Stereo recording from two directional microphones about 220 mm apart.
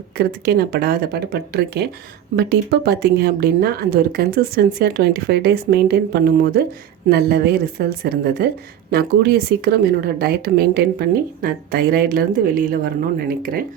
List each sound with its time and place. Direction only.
0.2 s speech: 45° right (ahead or behind)